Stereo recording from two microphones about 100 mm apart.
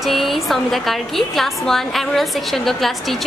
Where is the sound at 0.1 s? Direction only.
Centre (ahead or behind).